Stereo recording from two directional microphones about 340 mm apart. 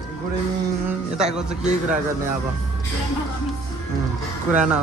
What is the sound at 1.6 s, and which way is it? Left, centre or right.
Speech, right.